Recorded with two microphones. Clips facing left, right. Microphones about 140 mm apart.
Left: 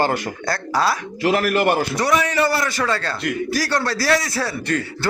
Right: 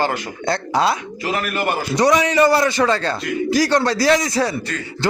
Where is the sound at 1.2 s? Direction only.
70° left (ahead or behind).